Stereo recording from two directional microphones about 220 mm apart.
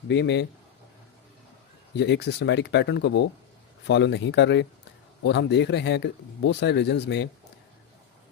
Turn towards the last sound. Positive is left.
turn(degrees=50)  # may be behind; listen again after turning